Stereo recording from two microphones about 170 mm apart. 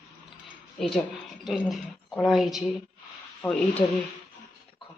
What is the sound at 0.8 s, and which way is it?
Speech, centre (ahead or behind).